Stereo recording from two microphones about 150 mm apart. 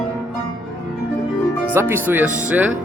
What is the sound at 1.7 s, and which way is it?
Speech, 15° right (ahead or behind).